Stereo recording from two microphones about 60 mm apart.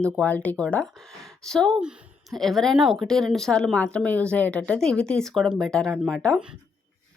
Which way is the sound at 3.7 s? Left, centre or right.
Left.